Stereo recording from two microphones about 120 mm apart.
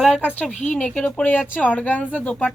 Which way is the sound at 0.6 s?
90° left.